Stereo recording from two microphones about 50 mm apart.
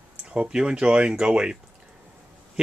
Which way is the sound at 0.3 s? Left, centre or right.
Centre.